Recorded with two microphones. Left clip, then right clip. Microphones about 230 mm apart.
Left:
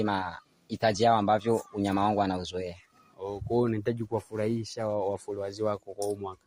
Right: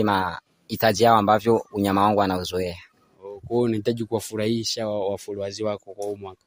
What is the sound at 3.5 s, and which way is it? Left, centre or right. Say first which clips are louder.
Speech: right 6 dB; right.